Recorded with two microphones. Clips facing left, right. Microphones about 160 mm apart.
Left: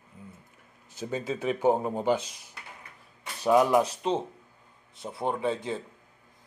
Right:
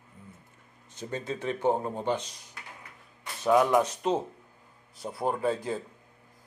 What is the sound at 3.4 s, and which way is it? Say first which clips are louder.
Speech: left 1 dB; 10° left (ahead or behind).